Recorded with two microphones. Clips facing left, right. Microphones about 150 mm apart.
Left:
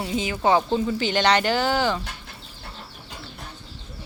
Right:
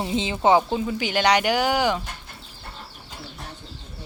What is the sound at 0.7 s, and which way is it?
Speech, 10° right (ahead or behind).